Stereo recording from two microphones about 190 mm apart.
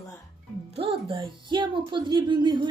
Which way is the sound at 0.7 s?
30° right (ahead or behind).